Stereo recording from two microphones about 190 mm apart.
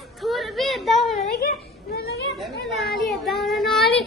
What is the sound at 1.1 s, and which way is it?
Speech, 50° left (ahead or behind).